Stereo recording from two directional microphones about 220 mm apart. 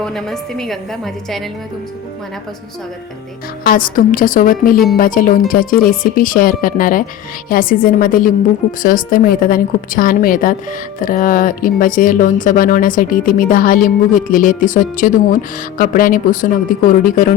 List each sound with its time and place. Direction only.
0.0 s a woman's voice: centre (ahead or behind)
3.6 s a woman's voice: 40° left (ahead or behind)